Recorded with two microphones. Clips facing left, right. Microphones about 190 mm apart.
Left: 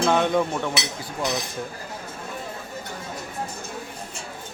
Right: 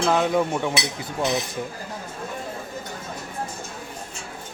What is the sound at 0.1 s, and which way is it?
Speech, 5° right (ahead or behind).